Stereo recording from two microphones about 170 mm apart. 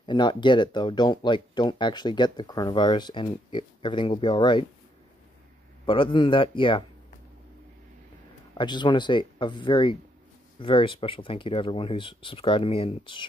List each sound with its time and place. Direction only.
0.0 s speech: 25° left (ahead or behind)
5.9 s speech: 30° left (ahead or behind)
8.5 s speech: 25° left (ahead or behind)